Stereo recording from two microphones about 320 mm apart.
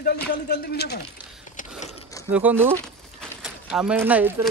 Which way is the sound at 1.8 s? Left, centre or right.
Centre.